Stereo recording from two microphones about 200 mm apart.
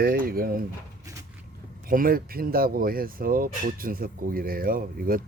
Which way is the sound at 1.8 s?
45° right (ahead or behind).